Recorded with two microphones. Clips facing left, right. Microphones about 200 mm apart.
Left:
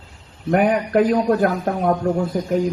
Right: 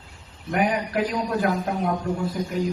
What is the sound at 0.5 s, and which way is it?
A man's voice, 50° left (ahead or behind).